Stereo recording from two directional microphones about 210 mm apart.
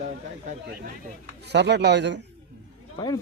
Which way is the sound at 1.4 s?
55° right (ahead or behind).